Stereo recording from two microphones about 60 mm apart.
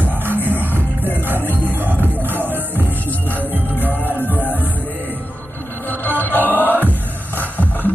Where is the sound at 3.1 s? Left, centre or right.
Left.